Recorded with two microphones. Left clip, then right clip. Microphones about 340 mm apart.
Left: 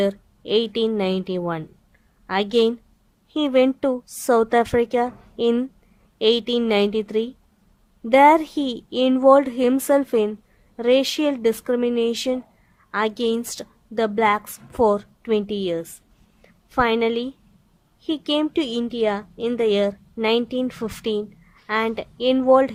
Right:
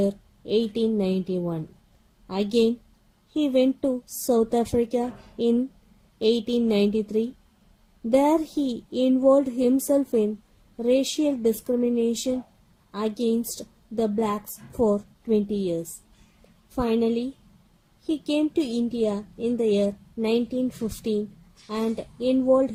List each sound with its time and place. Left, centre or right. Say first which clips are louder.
0.0 s a woman's voice: left 4 dB; left
8.6 s a child's voice: left 2 dB; left
9.0 s a woman's voice: left 5 dB; left
13.9 s a woman's voice: left 7 dB; left